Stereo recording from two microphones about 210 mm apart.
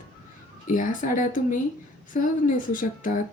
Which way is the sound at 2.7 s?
40° left (ahead or behind).